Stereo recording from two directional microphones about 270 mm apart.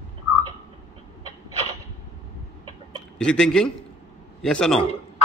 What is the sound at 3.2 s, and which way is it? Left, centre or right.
A man's voice, centre.